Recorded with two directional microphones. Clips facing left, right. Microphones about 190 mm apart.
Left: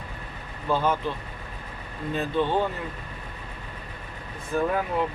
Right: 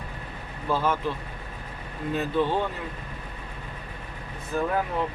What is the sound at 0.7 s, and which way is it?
Speech, centre (ahead or behind).